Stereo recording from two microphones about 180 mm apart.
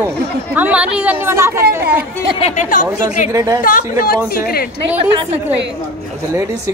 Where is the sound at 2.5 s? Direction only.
45° left (ahead or behind).